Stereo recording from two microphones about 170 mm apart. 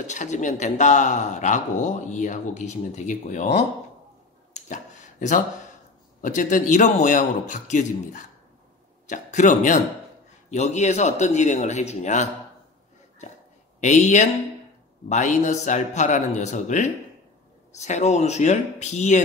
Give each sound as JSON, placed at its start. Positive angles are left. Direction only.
{"t": 0.0, "sound": "a man's voice", "side_deg": 45}
{"t": 4.6, "sound": "a sound", "side_deg": 45}
{"t": 6.2, "sound": "a man's voice", "side_deg": 50}
{"t": 13.7, "sound": "a man's voice", "side_deg": 45}